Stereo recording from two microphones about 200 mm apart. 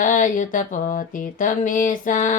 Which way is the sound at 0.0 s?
40° left (ahead or behind).